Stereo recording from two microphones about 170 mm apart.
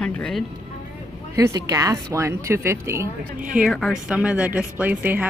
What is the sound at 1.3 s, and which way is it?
A woman's voice, 20° right (ahead or behind).